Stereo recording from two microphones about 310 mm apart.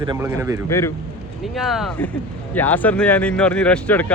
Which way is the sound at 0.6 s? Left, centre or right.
Centre.